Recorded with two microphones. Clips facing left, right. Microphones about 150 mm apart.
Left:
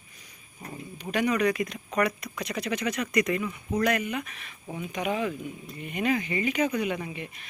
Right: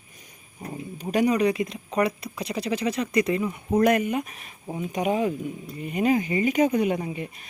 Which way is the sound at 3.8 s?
45° right (ahead or behind).